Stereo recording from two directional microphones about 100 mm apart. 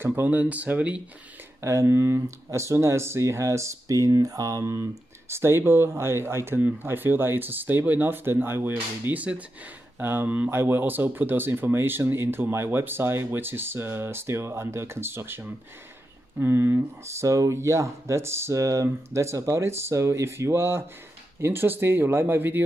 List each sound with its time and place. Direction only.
0.0 s speech: 20° right (ahead or behind)
1.6 s speech: 25° right (ahead or behind)